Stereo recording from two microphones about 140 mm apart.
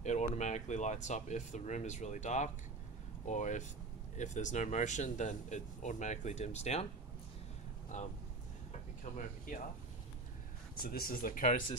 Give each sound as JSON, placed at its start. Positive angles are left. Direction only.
{"t": 0.0, "sound": "speech", "side_deg": 55}
{"t": 7.9, "sound": "speech", "side_deg": 60}
{"t": 10.8, "sound": "speech", "side_deg": 90}